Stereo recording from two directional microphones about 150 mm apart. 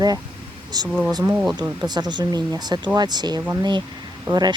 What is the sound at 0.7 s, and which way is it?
Speech, 25° right (ahead or behind).